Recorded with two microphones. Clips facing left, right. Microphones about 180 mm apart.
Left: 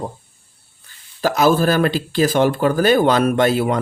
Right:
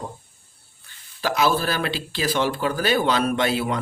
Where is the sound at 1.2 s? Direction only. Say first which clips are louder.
Left 6 dB; 45° left (ahead or behind).